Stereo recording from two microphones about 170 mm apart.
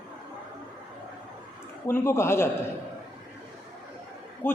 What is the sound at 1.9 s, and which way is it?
Speech, 15° left (ahead or behind).